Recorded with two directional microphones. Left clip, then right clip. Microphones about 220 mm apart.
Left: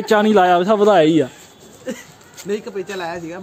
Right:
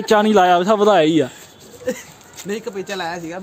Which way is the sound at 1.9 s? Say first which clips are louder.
Right 5 dB; 45° right (ahead or behind).